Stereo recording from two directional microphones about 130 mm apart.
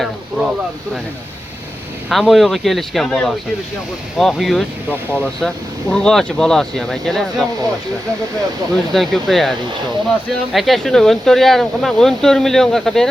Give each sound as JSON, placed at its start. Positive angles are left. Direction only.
{"t": 2.0, "sound": "speech", "side_deg": 0}
{"t": 8.9, "sound": "speech", "side_deg": 0}